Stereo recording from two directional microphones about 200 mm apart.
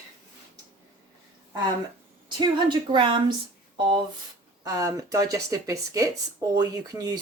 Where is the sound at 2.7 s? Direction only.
25° right (ahead or behind).